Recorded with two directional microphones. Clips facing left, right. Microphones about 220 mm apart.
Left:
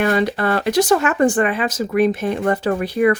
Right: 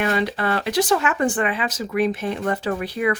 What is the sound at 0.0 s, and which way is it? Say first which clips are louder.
Speech: left 4 dB; 45° left (ahead or behind).